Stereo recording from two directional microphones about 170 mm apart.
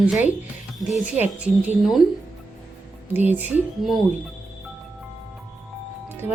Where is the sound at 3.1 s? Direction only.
10° right (ahead or behind).